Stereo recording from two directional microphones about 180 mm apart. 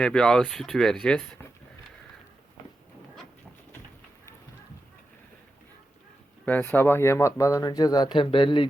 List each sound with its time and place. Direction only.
0.0 s speech: 5° left (ahead or behind)
6.4 s speech: 10° left (ahead or behind); by 8.6 s 25° left (ahead or behind)